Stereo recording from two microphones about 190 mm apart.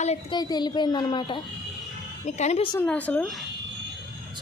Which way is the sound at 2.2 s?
35° left (ahead or behind).